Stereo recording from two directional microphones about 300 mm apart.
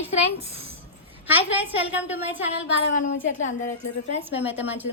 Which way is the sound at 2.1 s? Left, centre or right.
Centre.